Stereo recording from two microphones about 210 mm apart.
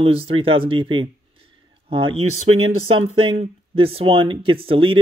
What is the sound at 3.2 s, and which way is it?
Speech, 25° right (ahead or behind).